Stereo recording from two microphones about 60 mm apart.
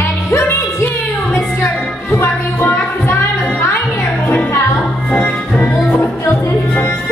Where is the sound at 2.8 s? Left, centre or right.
Left.